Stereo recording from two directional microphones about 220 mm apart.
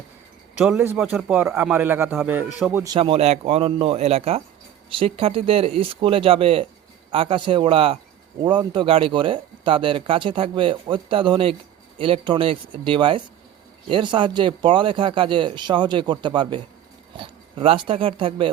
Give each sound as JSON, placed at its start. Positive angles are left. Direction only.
{"t": 0.6, "sound": "a man's voice", "side_deg": -5}
{"t": 2.8, "sound": "speech", "side_deg": -20}